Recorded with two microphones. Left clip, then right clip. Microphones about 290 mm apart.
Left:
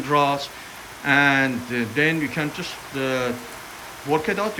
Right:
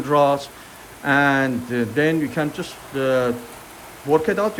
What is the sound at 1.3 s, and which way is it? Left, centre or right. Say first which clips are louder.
Speech: even; centre.